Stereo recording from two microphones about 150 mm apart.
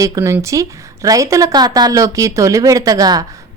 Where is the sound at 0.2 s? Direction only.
15° right (ahead or behind).